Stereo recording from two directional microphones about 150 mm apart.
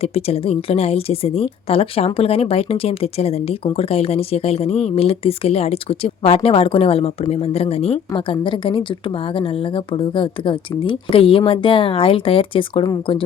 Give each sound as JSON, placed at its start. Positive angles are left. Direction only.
{"t": 0.0, "sound": "a woman's voice", "side_deg": 40}